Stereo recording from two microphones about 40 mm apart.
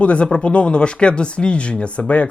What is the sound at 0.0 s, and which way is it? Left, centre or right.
Speech, left.